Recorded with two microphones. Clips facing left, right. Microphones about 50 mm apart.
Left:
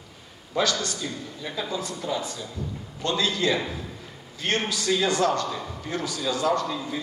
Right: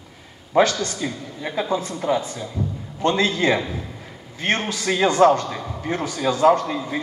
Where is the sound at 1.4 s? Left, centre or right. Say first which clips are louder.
Right 8 dB; right.